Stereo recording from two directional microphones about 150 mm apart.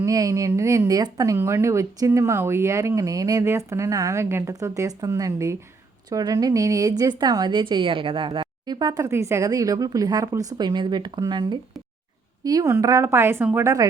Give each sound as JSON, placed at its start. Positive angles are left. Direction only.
{"t": 0.0, "sound": "speech", "side_deg": -20}
{"t": 9.0, "sound": "speech", "side_deg": -15}